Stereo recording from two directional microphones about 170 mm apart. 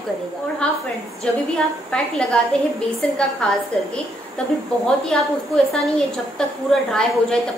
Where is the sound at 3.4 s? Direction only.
5° left (ahead or behind).